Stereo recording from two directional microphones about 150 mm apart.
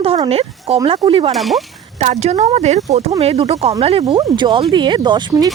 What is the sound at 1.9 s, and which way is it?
Speech, 50° right (ahead or behind).